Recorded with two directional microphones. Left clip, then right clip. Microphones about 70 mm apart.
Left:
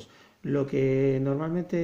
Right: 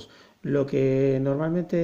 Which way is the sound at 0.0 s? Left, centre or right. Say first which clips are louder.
Right 2 dB; right.